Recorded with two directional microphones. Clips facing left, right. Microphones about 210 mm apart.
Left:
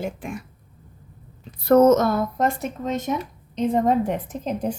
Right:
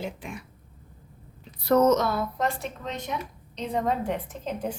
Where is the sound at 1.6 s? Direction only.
50° left (ahead or behind).